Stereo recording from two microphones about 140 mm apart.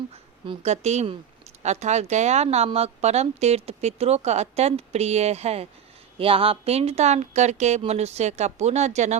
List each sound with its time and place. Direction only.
0.6 s speech: 50° right (ahead or behind)